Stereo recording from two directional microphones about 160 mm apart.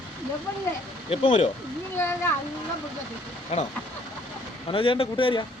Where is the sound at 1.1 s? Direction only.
35° left (ahead or behind).